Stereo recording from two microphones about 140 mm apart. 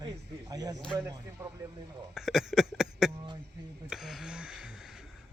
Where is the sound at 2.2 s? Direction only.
Centre (ahead or behind).